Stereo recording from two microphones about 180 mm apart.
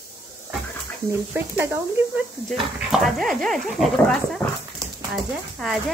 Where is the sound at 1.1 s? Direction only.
10° right (ahead or behind).